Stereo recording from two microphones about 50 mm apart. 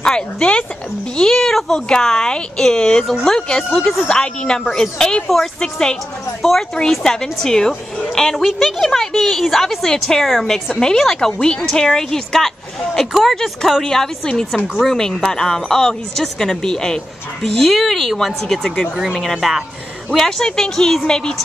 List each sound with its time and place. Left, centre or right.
0.0 s speech: centre
6.4 s a woman's voice: centre